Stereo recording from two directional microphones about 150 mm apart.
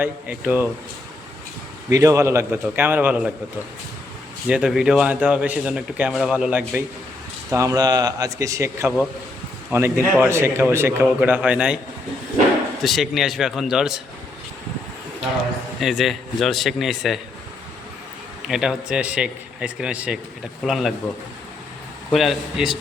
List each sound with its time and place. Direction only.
0.0 s a man's voice: 10° right (ahead or behind)
1.9 s a man's voice: 20° right (ahead or behind)
4.4 s a man's voice: 5° right (ahead or behind)
7.5 s a man's voice: 20° right (ahead or behind)
12.8 s speech: centre (ahead or behind)
15.8 s speech: centre (ahead or behind)
18.4 s speech: 5° right (ahead or behind)
22.1 s speech: centre (ahead or behind)